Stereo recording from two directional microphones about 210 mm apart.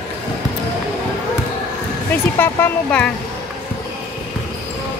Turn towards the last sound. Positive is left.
turn(degrees=10)  # may be behind; listen again after turning